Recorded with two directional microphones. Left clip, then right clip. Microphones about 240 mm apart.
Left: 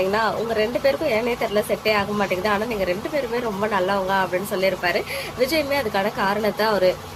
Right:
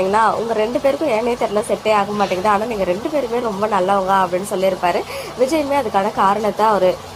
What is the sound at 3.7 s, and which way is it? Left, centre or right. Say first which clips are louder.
A woman's voice: right 6 dB; centre.